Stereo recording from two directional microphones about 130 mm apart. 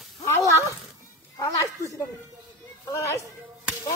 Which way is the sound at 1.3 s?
25° left (ahead or behind).